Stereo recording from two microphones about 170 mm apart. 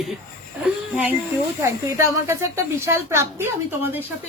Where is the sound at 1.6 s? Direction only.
15° right (ahead or behind).